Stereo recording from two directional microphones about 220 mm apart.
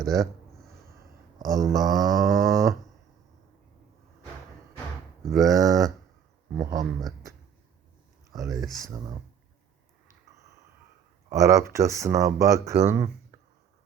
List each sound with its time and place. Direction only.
0.0 s a sound: centre (ahead or behind)
1.5 s speech: 15° right (ahead or behind)
1.8 s a sound: centre (ahead or behind)
2.0 s speech: 15° right (ahead or behind)
5.2 s speech: centre (ahead or behind)
5.5 s speech: 15° right (ahead or behind)
8.3 s speech: 15° right (ahead or behind)
11.3 s speech: 15° right (ahead or behind)